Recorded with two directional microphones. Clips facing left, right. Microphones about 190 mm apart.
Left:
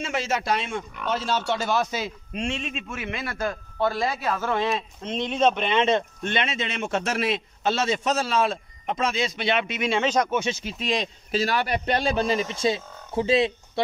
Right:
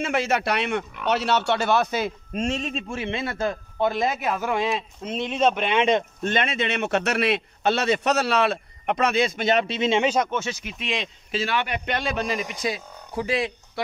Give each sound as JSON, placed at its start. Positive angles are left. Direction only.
{"t": 0.0, "sound": "a man's voice", "side_deg": -60}
{"t": 6.2, "sound": "speech", "side_deg": -50}
{"t": 9.8, "sound": "speech", "side_deg": -20}
{"t": 10.0, "sound": "speech", "side_deg": -5}
{"t": 10.3, "sound": "speech", "side_deg": 15}
{"t": 10.6, "sound": "a man's voice", "side_deg": 35}